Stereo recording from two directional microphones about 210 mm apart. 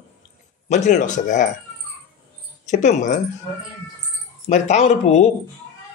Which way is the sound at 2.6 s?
35° left (ahead or behind).